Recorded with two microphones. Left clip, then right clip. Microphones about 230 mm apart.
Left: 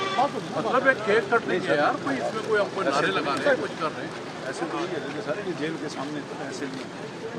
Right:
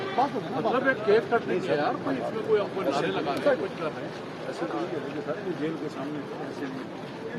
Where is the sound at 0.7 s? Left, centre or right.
Centre.